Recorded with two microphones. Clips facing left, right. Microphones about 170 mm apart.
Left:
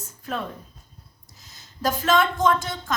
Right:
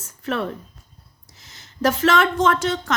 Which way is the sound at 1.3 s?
90° right.